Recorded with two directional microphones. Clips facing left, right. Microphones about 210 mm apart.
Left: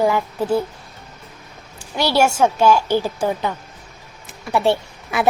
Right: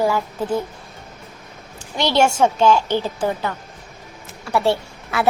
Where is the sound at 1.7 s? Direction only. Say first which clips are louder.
Even; 10° left (ahead or behind).